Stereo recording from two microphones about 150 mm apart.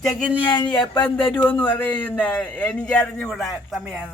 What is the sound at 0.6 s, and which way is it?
Speech, 30° left (ahead or behind).